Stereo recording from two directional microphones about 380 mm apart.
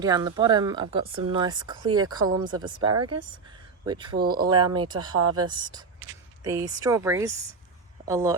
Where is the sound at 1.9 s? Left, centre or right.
Right.